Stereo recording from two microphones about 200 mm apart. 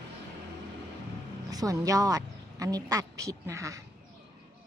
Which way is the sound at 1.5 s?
20° right (ahead or behind).